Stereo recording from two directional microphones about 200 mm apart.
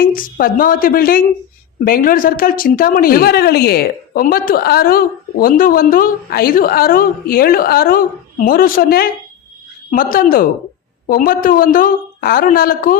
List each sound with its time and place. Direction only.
0.0 s a woman's voice: 45° left (ahead or behind)